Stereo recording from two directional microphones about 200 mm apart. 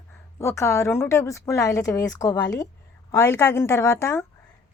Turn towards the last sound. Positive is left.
turn(degrees=15)  # may be behind; listen again after turning